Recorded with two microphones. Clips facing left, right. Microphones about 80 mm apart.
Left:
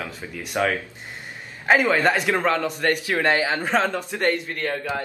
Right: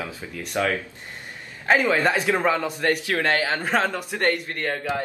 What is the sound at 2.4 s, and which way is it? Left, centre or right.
Speech, centre.